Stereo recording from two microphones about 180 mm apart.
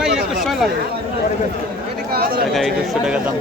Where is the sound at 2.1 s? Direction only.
55° right (ahead or behind).